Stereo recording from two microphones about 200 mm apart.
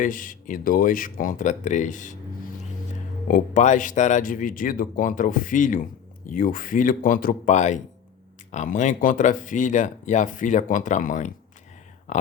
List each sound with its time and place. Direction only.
0.0 s speech: 40° left (ahead or behind)
3.2 s speech: 40° left (ahead or behind)